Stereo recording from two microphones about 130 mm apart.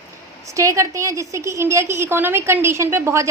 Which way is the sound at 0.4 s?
25° right (ahead or behind).